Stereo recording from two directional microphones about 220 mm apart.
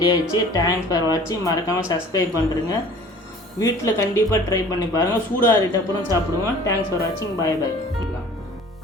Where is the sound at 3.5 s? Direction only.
15° left (ahead or behind).